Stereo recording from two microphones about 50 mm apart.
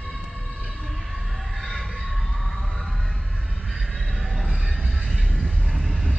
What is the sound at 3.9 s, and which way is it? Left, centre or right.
Train, centre.